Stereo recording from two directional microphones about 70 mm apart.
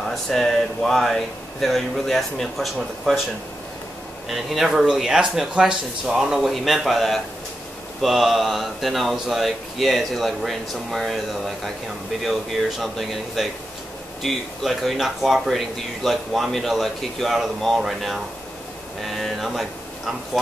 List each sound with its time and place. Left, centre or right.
0.1 s speech: centre
4.3 s speech: centre